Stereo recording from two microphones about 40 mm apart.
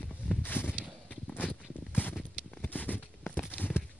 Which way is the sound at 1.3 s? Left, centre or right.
Left.